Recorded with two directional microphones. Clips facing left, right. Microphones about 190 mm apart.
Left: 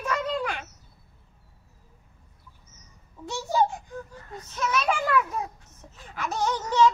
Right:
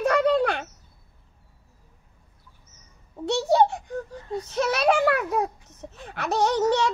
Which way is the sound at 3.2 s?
70° right (ahead or behind).